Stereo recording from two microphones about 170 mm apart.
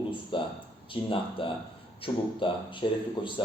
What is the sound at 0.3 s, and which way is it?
Speech, 30° left (ahead or behind).